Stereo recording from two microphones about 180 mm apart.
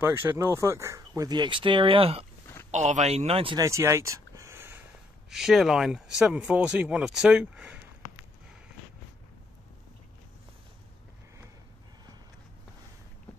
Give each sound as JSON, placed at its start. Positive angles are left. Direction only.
{"t": 0.0, "sound": "speech", "side_deg": -10}
{"t": 3.6, "sound": "a sound", "side_deg": -15}
{"t": 5.3, "sound": "speech", "side_deg": 0}